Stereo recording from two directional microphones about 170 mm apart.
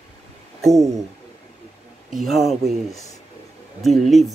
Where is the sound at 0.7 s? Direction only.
20° right (ahead or behind).